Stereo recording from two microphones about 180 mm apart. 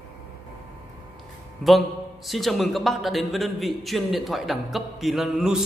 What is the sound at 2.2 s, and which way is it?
A man's voice, centre (ahead or behind).